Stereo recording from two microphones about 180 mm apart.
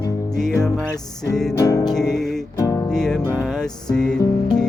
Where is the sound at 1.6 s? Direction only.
20° left (ahead or behind).